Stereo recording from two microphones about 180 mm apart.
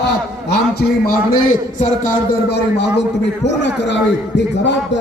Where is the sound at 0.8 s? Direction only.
55° left (ahead or behind).